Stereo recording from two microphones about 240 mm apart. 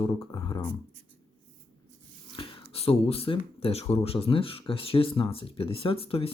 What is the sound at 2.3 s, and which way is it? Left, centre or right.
Speech, left.